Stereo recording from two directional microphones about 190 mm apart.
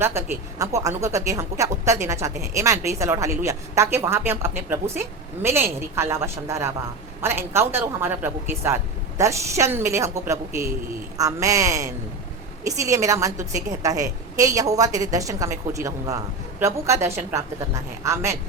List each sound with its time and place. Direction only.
0.0 s speech: 15° right (ahead or behind)